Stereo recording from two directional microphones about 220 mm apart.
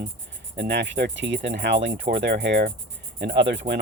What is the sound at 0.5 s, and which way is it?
Speech, 50° right (ahead or behind).